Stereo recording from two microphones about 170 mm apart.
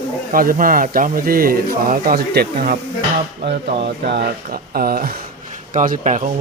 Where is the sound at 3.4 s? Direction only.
80° right; by 5.2 s 60° right (ahead or behind).